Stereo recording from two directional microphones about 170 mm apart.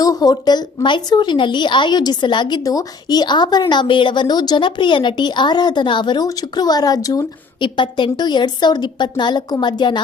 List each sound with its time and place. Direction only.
0.0 s a woman's voice: 20° left (ahead or behind)